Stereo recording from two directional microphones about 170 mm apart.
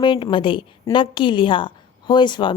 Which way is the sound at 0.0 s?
25° left (ahead or behind).